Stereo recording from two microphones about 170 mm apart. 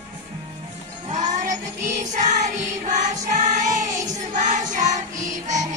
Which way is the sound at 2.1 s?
45° right (ahead or behind).